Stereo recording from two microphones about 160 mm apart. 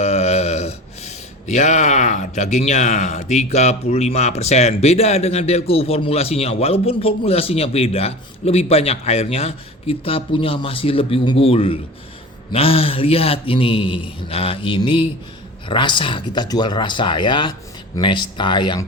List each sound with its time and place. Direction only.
0.0 s speech: 40° left (ahead or behind)